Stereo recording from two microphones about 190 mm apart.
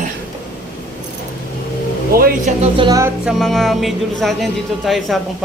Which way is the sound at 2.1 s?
50° right (ahead or behind).